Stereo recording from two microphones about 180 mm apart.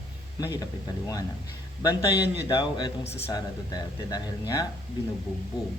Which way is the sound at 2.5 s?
25° left (ahead or behind).